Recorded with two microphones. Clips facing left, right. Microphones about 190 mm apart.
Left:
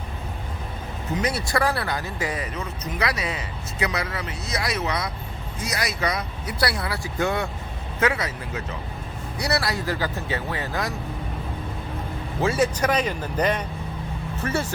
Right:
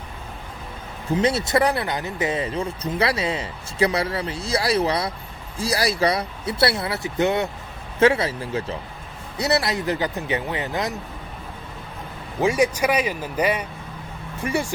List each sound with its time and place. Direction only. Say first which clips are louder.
1.1 s speech: right 5 dB; 25° right (ahead or behind)
12.4 s speech: right 2 dB; 15° right (ahead or behind)